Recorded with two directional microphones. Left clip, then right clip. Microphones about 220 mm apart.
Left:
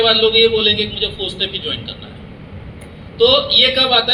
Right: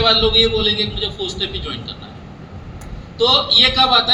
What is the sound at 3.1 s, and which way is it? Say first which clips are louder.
Speech: left 1 dB; 25° right (ahead or behind).